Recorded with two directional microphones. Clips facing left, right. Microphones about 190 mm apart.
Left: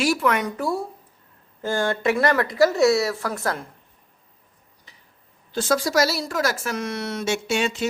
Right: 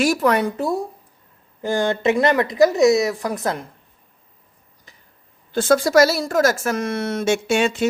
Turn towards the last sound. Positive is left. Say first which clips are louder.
# right 5 dB
turn(degrees=-55)  # may be behind; listen again after turning